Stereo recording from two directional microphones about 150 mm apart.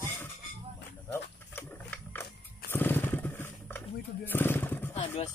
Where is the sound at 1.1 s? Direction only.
10° left (ahead or behind).